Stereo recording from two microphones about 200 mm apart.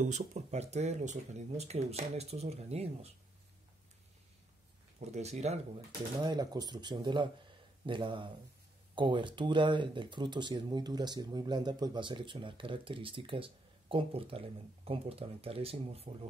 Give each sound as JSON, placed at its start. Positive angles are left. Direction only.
{"t": 0.0, "sound": "speech", "side_deg": -35}
{"t": 5.1, "sound": "speech", "side_deg": -35}
{"t": 6.2, "sound": "speech", "side_deg": -20}